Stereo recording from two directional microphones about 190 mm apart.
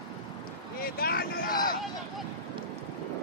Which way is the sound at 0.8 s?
50° left (ahead or behind).